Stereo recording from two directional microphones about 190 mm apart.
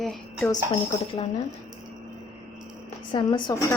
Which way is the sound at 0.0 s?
Centre (ahead or behind).